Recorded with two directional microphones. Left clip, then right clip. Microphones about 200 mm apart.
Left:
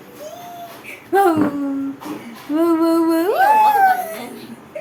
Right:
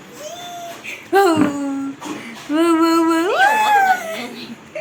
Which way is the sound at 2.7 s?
10° left (ahead or behind).